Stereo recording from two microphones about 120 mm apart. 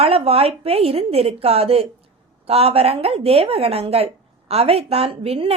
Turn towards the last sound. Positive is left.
turn(degrees=-50)  # may be behind; listen again after turning